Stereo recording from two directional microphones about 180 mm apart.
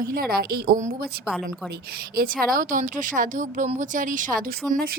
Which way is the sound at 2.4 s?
50° right (ahead or behind).